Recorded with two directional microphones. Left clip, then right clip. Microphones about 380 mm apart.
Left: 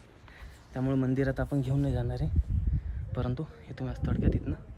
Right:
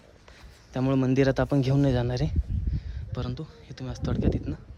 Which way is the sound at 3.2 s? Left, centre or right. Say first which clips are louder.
Left 1 dB; centre.